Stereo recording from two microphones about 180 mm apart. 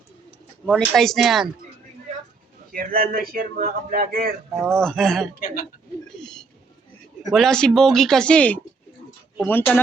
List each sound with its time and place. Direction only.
0.6 s speech: centre (ahead or behind)
2.7 s speech: 55° right (ahead or behind)
4.6 s speech: centre (ahead or behind)
7.3 s speech: centre (ahead or behind)